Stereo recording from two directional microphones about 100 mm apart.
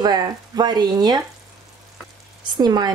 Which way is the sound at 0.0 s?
45° right (ahead or behind).